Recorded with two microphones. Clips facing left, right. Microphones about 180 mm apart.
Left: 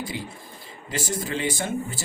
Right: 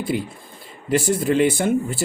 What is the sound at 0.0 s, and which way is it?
Speech, 60° right (ahead or behind).